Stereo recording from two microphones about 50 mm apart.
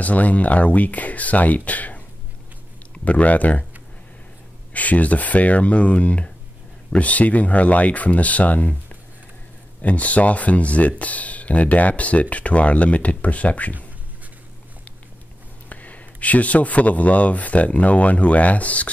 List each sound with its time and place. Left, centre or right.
0.0 s speech: left
4.7 s speech: left
15.7 s speech: left